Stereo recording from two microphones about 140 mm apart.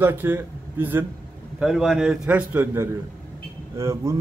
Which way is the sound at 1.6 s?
5° right (ahead or behind).